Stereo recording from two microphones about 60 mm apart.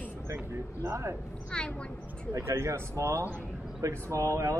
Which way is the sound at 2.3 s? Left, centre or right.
Right.